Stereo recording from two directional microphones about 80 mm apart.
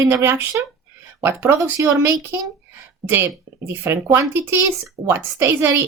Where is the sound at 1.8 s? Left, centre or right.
Right.